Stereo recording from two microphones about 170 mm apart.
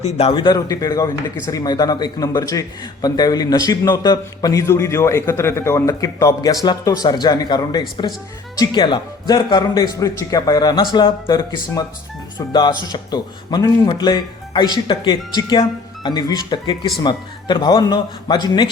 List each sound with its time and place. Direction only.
0.0 s speech: 35° left (ahead or behind)